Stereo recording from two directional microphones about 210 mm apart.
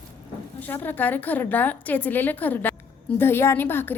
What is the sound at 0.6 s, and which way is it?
A woman's voice, 10° left (ahead or behind).